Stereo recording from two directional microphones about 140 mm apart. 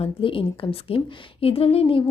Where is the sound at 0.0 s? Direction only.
40° left (ahead or behind).